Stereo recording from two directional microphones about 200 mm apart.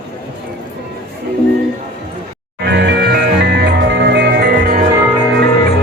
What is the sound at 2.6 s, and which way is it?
Music, 60° right (ahead or behind).